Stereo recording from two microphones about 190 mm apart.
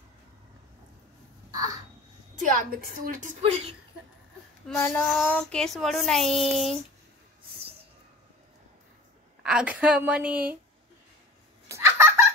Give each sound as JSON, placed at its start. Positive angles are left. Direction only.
{"t": 1.5, "sound": "a sound", "side_deg": -20}
{"t": 2.3, "sound": "a woman's voice", "side_deg": -45}
{"t": 3.4, "sound": "speech", "side_deg": -35}
{"t": 4.7, "sound": "child singing", "side_deg": 10}
{"t": 5.0, "sound": "speech", "side_deg": 0}
{"t": 9.4, "sound": "a woman's voice", "side_deg": -5}
{"t": 11.7, "sound": "a sound", "side_deg": -15}